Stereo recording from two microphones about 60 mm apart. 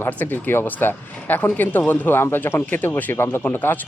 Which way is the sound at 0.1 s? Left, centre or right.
Left.